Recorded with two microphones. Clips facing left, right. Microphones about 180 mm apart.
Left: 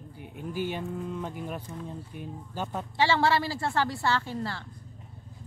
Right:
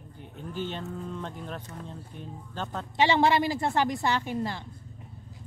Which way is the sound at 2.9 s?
20° right (ahead or behind).